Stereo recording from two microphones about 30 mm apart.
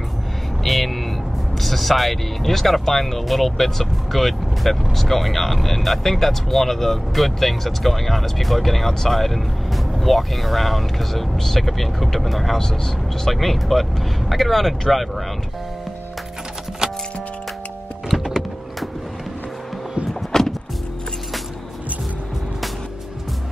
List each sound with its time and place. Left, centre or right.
0.7 s vehicle: centre
1.6 s speech: centre
16.8 s music: right
18.1 s power windows: centre
20.3 s music: centre